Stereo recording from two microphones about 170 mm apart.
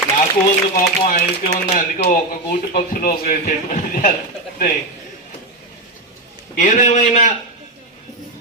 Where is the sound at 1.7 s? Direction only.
45° left (ahead or behind).